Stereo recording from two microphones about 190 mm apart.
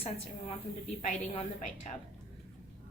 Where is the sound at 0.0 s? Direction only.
30° left (ahead or behind).